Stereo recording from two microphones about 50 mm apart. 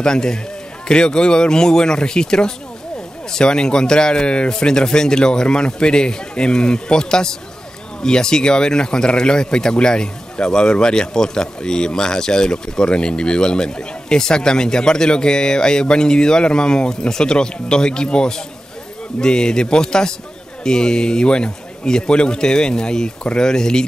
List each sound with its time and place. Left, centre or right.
0.0 s speech: centre